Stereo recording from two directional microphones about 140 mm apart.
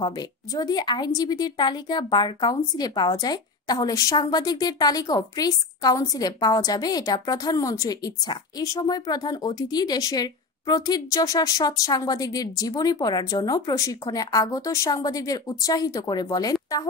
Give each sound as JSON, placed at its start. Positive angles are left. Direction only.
{"t": 0.0, "sound": "a woman's voice", "side_deg": 30}